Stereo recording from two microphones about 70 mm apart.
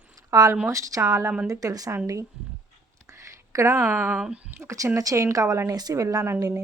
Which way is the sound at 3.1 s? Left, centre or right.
Right.